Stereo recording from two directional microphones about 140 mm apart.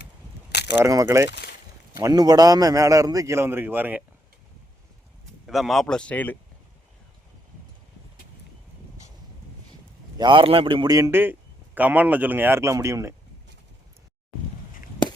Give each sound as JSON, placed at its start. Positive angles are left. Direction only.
{"t": 0.7, "sound": "a man's voice", "side_deg": -20}
{"t": 5.5, "sound": "speech", "side_deg": 0}
{"t": 10.2, "sound": "a man's voice", "side_deg": -35}